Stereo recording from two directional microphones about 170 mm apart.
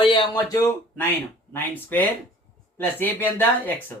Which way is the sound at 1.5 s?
10° left (ahead or behind).